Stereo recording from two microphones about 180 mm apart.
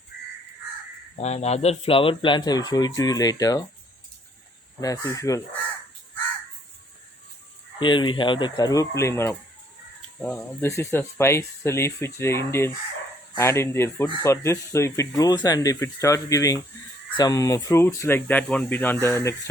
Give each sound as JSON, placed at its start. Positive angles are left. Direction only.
{"t": 1.2, "sound": "speech", "side_deg": 35}
{"t": 4.8, "sound": "speech", "side_deg": 20}
{"t": 7.8, "sound": "speech", "side_deg": 25}